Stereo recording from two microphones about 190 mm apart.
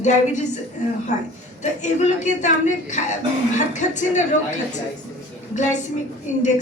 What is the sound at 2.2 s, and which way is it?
A woman's voice, 40° left (ahead or behind).